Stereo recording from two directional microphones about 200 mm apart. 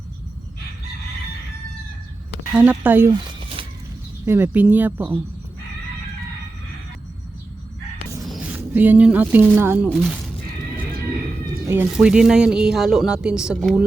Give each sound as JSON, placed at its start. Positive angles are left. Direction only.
{"t": 2.5, "sound": "speech", "side_deg": -5}
{"t": 3.1, "sound": "a sound", "side_deg": -25}
{"t": 4.3, "sound": "speech", "side_deg": -10}
{"t": 8.2, "sound": "speech", "side_deg": -5}
{"t": 11.7, "sound": "speech", "side_deg": -5}